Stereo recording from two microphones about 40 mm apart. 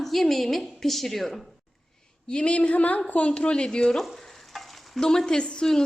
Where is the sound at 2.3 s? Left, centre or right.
Left.